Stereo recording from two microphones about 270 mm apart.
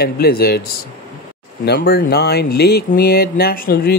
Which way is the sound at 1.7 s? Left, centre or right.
Left.